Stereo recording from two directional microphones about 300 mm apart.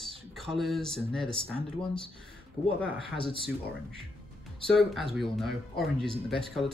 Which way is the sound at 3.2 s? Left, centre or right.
Centre.